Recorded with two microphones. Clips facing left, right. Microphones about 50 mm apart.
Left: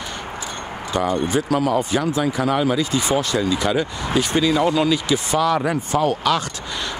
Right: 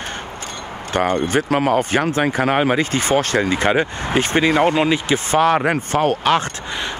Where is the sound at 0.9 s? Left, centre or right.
Right.